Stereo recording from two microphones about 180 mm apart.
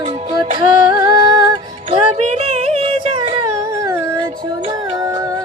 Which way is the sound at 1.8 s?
35° right (ahead or behind).